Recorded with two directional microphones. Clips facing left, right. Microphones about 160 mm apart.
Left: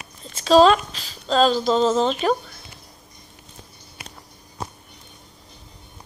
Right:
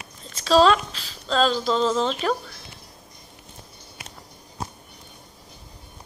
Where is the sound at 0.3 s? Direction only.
20° left (ahead or behind).